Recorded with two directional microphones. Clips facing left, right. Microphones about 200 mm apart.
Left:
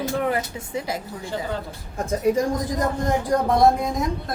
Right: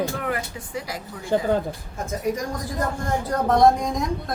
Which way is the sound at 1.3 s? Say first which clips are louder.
Right 8 dB; 50° right (ahead or behind).